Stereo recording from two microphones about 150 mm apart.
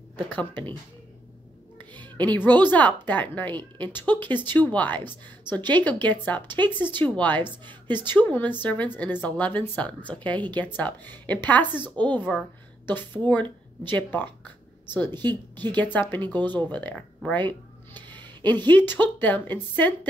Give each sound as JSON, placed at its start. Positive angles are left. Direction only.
{"t": 0.3, "sound": "a woman's voice", "side_deg": 10}
{"t": 2.0, "sound": "music", "side_deg": 10}
{"t": 2.7, "sound": "a woman's voice", "side_deg": 10}
{"t": 17.9, "sound": "a sound", "side_deg": -30}
{"t": 18.4, "sound": "a woman's voice", "side_deg": 10}